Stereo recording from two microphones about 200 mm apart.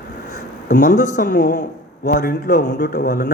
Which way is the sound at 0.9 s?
40° left (ahead or behind).